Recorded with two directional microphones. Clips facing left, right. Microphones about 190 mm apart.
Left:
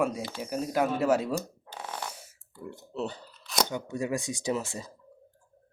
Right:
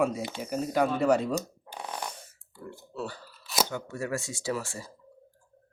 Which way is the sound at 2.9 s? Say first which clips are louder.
Left 3 dB; 20° left (ahead or behind).